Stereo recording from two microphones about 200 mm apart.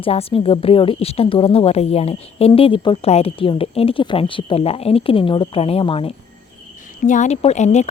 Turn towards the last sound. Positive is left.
turn(degrees=35)  # may be behind; listen again after turning